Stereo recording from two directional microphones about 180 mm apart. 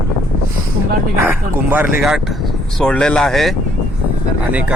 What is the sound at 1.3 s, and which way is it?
Speech, 10° right (ahead or behind).